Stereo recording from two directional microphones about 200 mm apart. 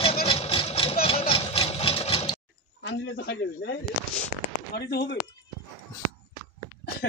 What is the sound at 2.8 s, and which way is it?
Speech, 70° left (ahead or behind).